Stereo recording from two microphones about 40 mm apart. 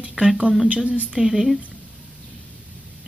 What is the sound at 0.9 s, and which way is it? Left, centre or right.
Speech, right.